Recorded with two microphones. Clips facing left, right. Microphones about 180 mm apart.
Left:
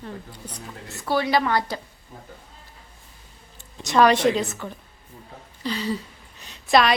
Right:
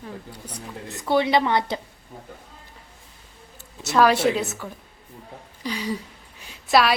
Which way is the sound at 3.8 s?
5° right (ahead or behind).